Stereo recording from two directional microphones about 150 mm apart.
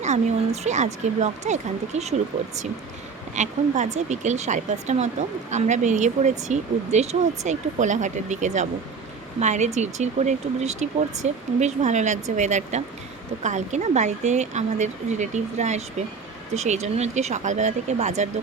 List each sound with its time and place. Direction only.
0.0 s speech: 50° right (ahead or behind)
3.3 s speech: 55° right (ahead or behind)